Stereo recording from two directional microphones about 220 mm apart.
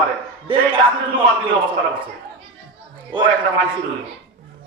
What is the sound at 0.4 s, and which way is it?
Speech, 25° right (ahead or behind).